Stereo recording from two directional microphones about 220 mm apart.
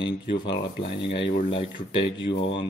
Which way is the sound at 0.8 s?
50° left (ahead or behind).